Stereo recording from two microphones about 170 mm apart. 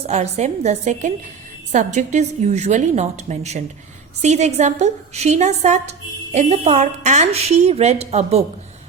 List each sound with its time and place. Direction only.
0.1 s a woman's voice: 40° right (ahead or behind)